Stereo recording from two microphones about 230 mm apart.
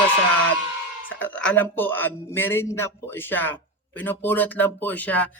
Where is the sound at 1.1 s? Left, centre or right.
Centre.